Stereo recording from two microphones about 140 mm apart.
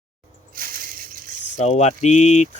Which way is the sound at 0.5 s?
90° right.